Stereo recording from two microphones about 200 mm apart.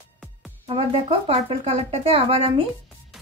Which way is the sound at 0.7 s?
30° right (ahead or behind).